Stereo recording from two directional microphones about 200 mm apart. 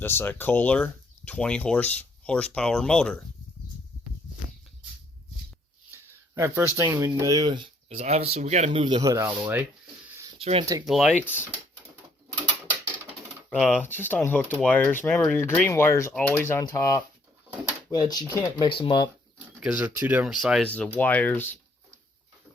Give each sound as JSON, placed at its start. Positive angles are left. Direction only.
{"t": 0.0, "sound": "speech", "side_deg": 10}
{"t": 5.9, "sound": "a sound", "side_deg": -10}
{"t": 6.7, "sound": "speech", "side_deg": -15}
{"t": 10.2, "sound": "a sound", "side_deg": -25}
{"t": 10.8, "sound": "speech", "side_deg": 0}
{"t": 13.5, "sound": "speech", "side_deg": 5}
{"t": 19.5, "sound": "speech", "side_deg": -5}